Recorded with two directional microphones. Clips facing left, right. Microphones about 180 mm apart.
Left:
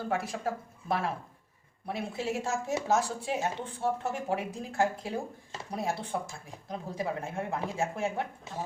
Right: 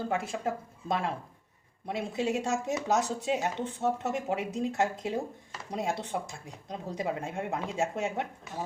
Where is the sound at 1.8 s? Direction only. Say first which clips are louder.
Right 3 dB; 20° right (ahead or behind).